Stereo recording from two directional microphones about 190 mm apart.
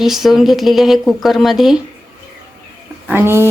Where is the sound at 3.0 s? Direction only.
10° right (ahead or behind).